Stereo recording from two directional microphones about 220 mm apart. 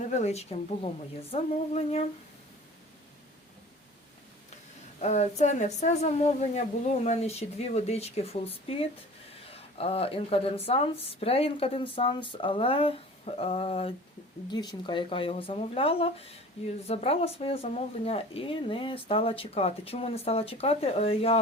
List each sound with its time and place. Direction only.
0.1 s speech: 30° left (ahead or behind)
4.9 s speech: 30° left (ahead or behind)
9.5 s speech: 25° left (ahead or behind)